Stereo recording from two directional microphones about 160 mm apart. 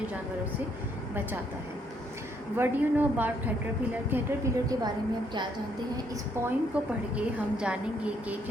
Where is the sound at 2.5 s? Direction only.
10° right (ahead or behind).